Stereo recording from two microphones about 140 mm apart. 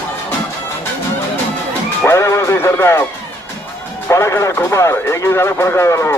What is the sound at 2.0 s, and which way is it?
Music, 20° left (ahead or behind).